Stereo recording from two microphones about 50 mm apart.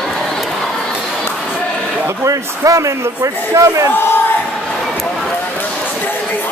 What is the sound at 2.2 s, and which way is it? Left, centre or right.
Speech, right.